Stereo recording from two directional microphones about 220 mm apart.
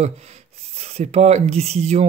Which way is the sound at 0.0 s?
30° right (ahead or behind).